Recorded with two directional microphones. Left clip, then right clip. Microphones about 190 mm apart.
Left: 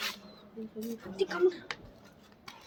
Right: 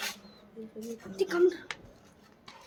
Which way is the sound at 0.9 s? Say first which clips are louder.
Right 2 dB; 35° right (ahead or behind).